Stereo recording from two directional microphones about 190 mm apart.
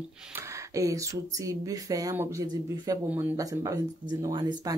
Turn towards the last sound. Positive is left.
turn(degrees=-25)  # may be behind; listen again after turning